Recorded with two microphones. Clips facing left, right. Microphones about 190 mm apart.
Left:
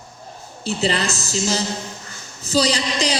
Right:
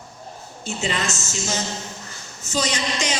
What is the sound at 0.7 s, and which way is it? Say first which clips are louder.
A woman's voice: left 5 dB; 35° left (ahead or behind).